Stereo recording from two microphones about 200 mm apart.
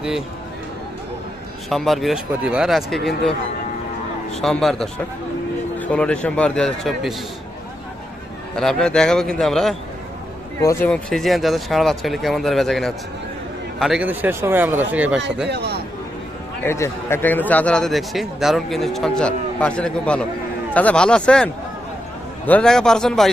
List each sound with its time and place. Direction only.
1.7 s a man's voice: centre (ahead or behind)
4.4 s a man's voice: centre (ahead or behind)
8.5 s a man's voice: 5° left (ahead or behind)
10.6 s a man's voice: 15° left (ahead or behind); by 15.2 s 5° right (ahead or behind)
15.4 s speech: 55° right (ahead or behind)
16.6 s a man's voice: 15° left (ahead or behind)